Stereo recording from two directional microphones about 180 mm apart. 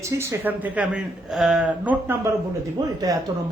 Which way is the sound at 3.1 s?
20° right (ahead or behind).